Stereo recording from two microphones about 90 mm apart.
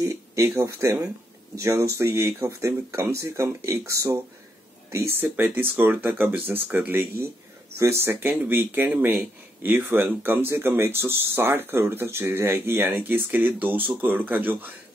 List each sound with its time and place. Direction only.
0.0 s speech: 30° right (ahead or behind)